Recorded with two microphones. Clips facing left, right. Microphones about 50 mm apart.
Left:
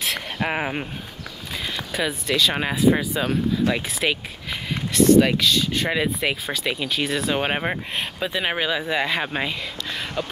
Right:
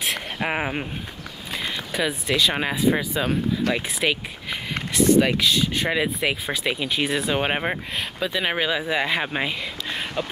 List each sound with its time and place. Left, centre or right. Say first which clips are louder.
0.0 s a sound: even; centre
1.9 s speech: even; centre
2.2 s speech: left 1 dB; centre
3.0 s speech: left 1 dB; centre
5.9 s speech: even; centre
6.4 s speech: even; centre
8.2 s speech: right 1 dB; centre
8.5 s speech: even; centre
10.2 s a sound: even; centre